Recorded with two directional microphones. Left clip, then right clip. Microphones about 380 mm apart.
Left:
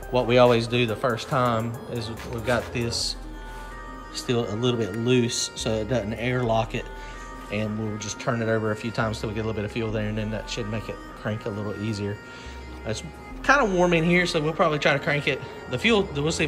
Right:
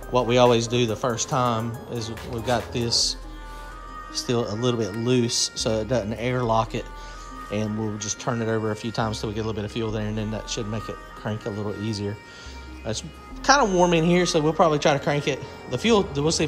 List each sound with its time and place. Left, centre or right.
0.1 s speech: centre
4.3 s speech: centre
5.2 s speech: right
5.7 s speech: centre